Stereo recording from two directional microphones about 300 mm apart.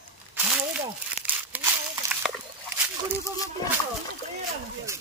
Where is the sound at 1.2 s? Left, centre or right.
Centre.